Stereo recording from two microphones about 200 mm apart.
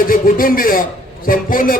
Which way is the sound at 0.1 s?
45° left (ahead or behind).